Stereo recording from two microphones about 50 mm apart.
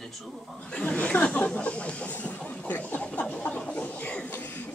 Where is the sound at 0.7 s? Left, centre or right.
Left.